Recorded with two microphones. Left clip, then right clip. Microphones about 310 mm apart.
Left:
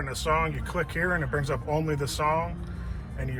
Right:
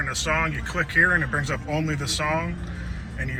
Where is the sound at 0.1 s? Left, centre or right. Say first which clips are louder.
Left 2 dB; left.